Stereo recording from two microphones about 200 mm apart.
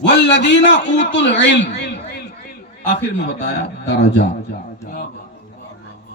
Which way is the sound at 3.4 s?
60° left (ahead or behind).